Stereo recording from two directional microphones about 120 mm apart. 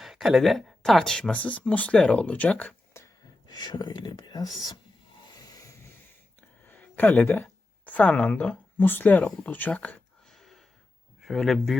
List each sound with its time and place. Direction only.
0.0 s speech: 5° right (ahead or behind); by 2.7 s 10° left (ahead or behind)
3.4 s speech: 35° left (ahead or behind)
6.7 s speech: 15° left (ahead or behind)